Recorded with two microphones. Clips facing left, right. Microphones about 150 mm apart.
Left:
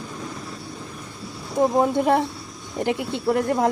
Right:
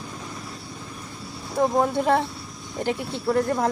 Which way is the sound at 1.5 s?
15° left (ahead or behind).